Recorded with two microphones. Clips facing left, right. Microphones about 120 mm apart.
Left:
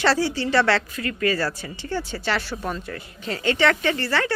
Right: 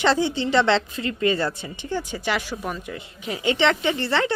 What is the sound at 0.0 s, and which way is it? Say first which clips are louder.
Speech: right 1 dB; 20° right (ahead or behind).